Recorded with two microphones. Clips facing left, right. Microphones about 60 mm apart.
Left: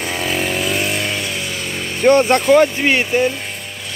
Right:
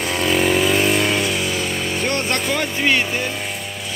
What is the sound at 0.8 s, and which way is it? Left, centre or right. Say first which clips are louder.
Vehicle: right 3 dB; right.